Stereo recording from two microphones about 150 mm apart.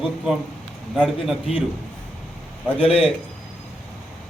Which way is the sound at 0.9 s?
5° right (ahead or behind).